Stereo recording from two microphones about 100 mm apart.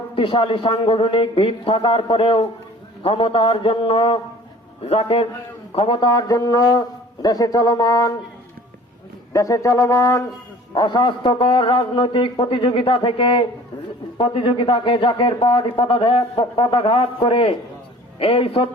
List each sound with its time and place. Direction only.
0.2 s a man's voice: 60° left (ahead or behind); by 5.2 s 80° left
5.7 s a man's voice: 60° left (ahead or behind)
6.1 s a man's voice: 40° left (ahead or behind)
9.3 s a man's voice: 35° left (ahead or behind)
10.8 s a man's voice: 50° left (ahead or behind); by 18.7 s 65° left (ahead or behind)